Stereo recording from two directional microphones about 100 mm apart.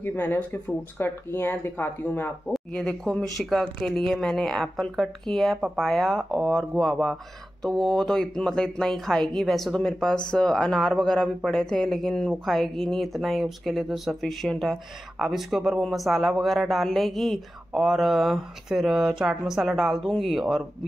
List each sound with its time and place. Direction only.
0.0 s speech: 20° left (ahead or behind)
2.5 s speech: 10° left (ahead or behind)